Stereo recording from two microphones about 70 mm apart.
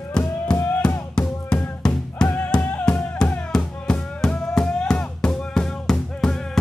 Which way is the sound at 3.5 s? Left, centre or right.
Centre.